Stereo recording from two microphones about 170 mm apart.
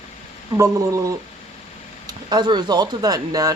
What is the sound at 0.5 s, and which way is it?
Speech, 20° right (ahead or behind).